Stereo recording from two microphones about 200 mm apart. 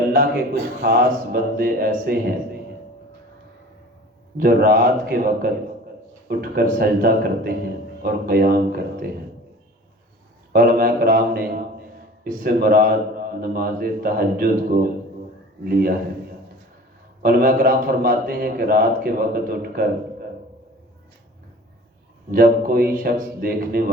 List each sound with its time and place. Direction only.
0.8 s a man's voice: 45° right (ahead or behind)
4.4 s a man's voice: 45° right (ahead or behind)
10.5 s a man's voice: 45° right (ahead or behind)
17.2 s a man's voice: 45° right (ahead or behind)
22.3 s a man's voice: 45° right (ahead or behind)